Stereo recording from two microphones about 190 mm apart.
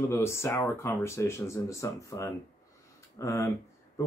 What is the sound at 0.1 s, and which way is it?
Speech, 15° left (ahead or behind).